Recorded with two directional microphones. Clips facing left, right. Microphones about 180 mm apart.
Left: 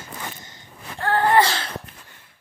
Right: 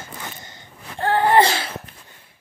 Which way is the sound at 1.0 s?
20° right (ahead or behind).